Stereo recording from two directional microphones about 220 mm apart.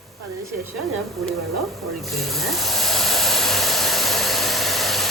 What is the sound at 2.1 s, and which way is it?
Hair dryer, centre (ahead or behind).